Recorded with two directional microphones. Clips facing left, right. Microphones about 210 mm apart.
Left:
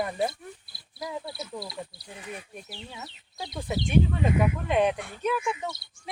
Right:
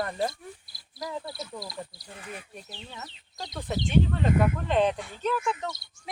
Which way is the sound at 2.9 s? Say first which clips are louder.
Left 1 dB; 5° left (ahead or behind).